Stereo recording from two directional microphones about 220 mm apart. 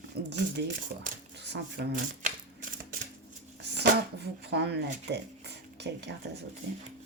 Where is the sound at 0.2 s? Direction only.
45° right (ahead or behind).